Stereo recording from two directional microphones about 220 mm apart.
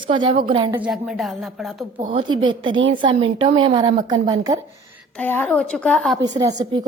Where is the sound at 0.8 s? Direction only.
5° right (ahead or behind).